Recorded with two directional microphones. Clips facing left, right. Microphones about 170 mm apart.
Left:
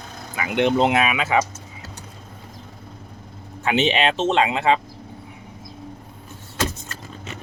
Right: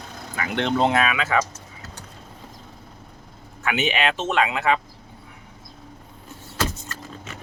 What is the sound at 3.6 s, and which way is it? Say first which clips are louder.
Speech: left 4 dB; 30° left (ahead or behind).